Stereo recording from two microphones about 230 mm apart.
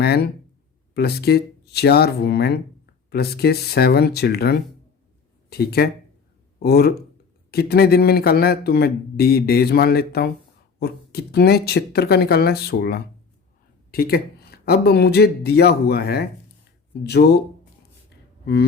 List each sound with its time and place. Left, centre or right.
0.0 s speech: left